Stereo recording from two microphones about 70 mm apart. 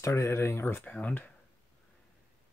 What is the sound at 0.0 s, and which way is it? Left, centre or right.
Speech, left.